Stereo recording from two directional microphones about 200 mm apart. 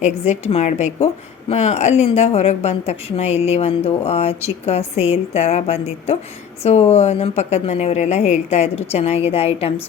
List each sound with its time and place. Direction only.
0.0 s a woman's voice: 35° left (ahead or behind)